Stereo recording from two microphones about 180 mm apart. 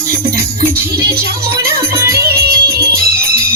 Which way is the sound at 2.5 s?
60° right (ahead or behind).